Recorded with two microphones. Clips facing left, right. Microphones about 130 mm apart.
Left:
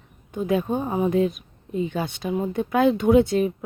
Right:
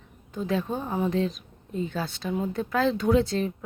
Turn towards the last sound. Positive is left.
turn(degrees=15)  # may be behind; listen again after turning